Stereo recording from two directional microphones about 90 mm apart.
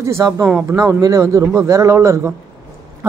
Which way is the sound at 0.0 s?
35° right (ahead or behind).